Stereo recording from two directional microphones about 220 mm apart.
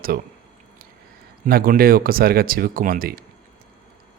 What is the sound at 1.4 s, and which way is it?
Speech, 40° right (ahead or behind).